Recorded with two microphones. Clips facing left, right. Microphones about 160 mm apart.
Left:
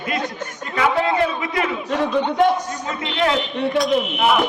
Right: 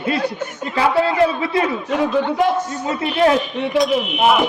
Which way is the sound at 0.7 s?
30° right (ahead or behind).